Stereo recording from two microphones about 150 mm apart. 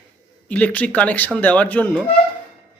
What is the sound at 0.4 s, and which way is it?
Speech, 10° left (ahead or behind).